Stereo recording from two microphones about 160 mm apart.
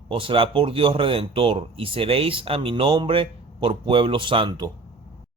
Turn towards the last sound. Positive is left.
turn(degrees=-30)  # may be behind; listen again after turning